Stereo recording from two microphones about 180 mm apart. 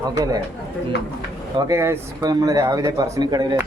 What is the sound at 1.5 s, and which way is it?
Speech, 15° right (ahead or behind).